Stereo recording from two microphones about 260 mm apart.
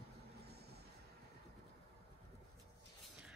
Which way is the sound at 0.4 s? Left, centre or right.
Right.